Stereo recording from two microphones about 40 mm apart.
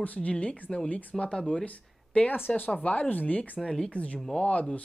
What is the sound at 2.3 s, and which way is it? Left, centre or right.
Speech, left.